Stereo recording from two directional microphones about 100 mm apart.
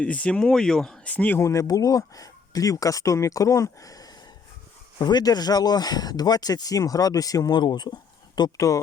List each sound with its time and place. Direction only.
0.0 s speech: 10° left (ahead or behind)
1.1 s speech: 15° left (ahead or behind)
1.4 s speech: 30° left (ahead or behind)
8.4 s speech: 35° left (ahead or behind)